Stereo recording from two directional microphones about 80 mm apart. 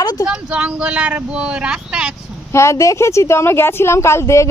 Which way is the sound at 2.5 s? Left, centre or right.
Left.